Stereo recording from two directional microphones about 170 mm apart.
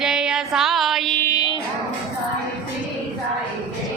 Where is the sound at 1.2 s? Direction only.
25° left (ahead or behind).